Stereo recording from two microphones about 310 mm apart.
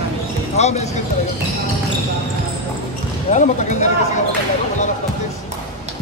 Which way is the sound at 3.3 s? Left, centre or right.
Left.